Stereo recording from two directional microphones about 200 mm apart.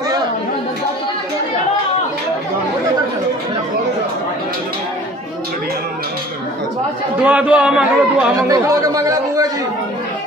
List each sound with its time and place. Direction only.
7.2 s a man's voice: 5° right (ahead or behind)
8.4 s chatter: 15° right (ahead or behind)